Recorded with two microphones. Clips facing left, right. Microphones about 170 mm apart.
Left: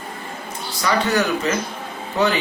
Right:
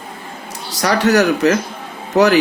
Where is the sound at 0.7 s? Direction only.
80° right.